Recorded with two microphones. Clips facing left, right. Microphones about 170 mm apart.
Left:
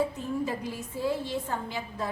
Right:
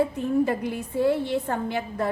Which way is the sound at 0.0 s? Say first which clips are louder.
Right 7 dB; 60° right (ahead or behind).